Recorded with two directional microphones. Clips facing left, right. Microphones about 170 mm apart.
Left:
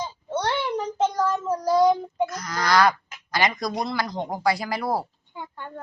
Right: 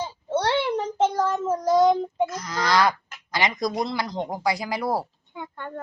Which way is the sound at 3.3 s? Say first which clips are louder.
Even; 20° right (ahead or behind).